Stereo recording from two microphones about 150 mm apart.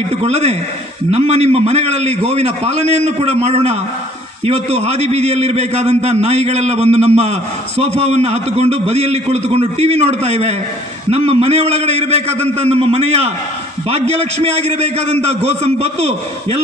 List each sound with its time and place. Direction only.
0.1 s a man's voice: 45° right (ahead or behind)